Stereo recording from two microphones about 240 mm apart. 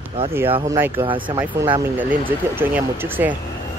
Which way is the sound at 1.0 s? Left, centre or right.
Right.